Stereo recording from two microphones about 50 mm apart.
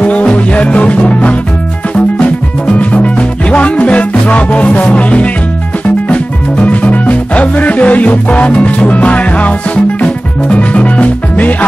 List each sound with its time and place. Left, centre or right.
0.0 s music: left
2.8 s music: left